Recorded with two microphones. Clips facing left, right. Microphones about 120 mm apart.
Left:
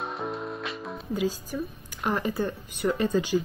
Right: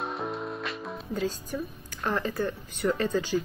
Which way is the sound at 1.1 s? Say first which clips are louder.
Left 2 dB; 10° left (ahead or behind).